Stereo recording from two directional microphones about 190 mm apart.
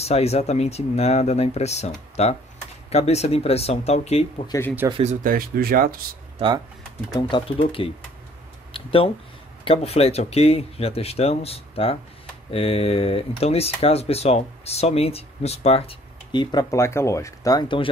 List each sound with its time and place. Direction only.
0.0 s speech: 35° left (ahead or behind)
4.5 s speech: 10° left (ahead or behind)
4.8 s speech: 30° right (ahead or behind)
5.2 s speech: 50° right (ahead or behind)
6.3 s speech: 25° right (ahead or behind)
7.2 s speech: 25° left (ahead or behind)